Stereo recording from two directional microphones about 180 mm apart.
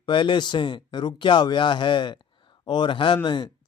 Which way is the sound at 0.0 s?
25° left (ahead or behind).